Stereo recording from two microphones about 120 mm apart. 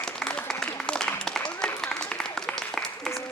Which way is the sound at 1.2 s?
5° left (ahead or behind).